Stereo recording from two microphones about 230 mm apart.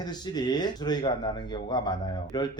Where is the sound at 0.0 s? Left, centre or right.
Centre.